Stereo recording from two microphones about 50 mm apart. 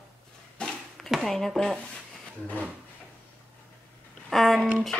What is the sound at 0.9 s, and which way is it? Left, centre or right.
Speech, centre.